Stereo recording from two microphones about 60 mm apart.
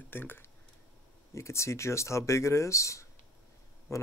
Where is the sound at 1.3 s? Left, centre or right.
Left.